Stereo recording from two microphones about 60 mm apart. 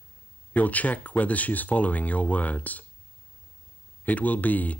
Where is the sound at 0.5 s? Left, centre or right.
Left.